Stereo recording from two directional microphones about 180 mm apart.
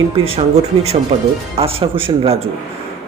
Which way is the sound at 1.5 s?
30° right (ahead or behind).